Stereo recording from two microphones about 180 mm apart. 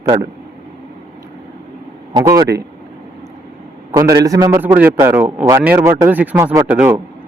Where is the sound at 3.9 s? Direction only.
20° right (ahead or behind).